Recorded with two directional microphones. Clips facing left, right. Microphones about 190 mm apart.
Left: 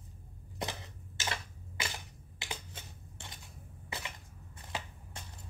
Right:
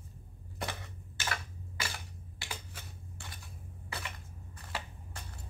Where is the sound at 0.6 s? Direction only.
20° left (ahead or behind).